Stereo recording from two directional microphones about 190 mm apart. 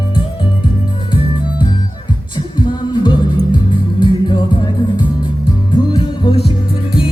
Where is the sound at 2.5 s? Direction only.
25° left (ahead or behind).